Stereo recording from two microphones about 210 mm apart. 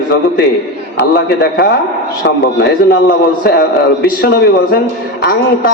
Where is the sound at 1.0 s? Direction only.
50° left (ahead or behind).